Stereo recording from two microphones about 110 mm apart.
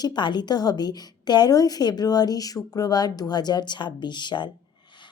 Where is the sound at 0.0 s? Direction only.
40° left (ahead or behind).